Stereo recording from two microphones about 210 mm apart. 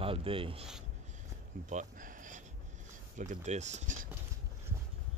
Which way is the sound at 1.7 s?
40° right (ahead or behind).